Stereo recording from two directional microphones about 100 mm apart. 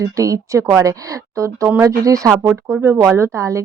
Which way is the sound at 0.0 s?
35° right (ahead or behind).